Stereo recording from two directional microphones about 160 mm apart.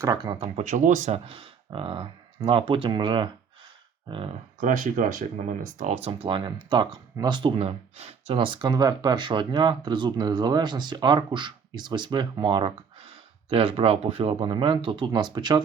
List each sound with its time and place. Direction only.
0.0 s speech: 25° right (ahead or behind)
0.5 s speech: 55° right (ahead or behind); by 4.4 s 35° right (ahead or behind)
4.6 s speech: 55° right (ahead or behind)
5.8 s speech: 40° right (ahead or behind)